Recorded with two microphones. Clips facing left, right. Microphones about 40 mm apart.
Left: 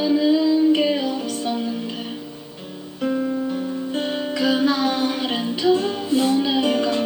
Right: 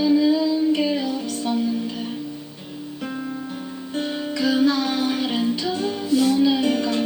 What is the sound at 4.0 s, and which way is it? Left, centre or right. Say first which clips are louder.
Music: even; centre.